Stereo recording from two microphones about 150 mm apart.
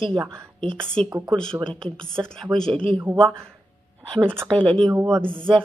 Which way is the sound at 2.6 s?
5° left (ahead or behind).